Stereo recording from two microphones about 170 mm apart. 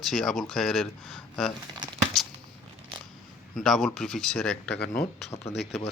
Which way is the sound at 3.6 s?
Centre (ahead or behind).